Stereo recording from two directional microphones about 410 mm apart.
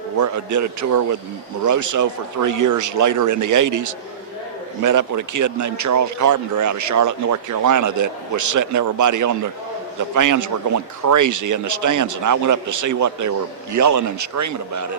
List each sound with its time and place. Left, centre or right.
0.2 s speech: right